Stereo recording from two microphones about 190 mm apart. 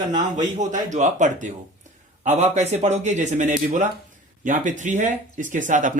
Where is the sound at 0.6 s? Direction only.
40° right (ahead or behind).